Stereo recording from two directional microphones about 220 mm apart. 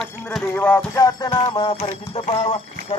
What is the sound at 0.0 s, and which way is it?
Music, 5° left (ahead or behind).